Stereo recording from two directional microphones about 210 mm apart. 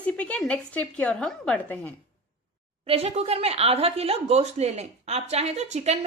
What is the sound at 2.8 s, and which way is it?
A woman's voice, 30° right (ahead or behind).